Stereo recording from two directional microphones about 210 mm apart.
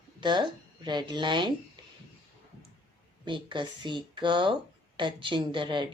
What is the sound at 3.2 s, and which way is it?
Speech, 25° right (ahead or behind).